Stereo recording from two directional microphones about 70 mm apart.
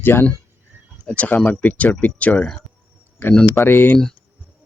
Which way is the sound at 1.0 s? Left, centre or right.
Left.